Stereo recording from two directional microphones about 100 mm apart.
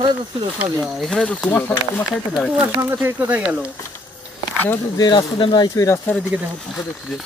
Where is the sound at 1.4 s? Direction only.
20° left (ahead or behind).